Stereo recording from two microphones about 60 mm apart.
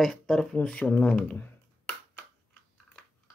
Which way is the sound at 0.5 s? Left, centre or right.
Centre.